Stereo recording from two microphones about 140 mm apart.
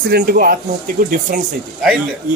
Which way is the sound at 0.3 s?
90° right.